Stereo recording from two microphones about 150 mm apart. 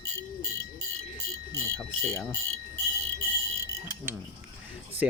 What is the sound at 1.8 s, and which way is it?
Speech, 5° left (ahead or behind).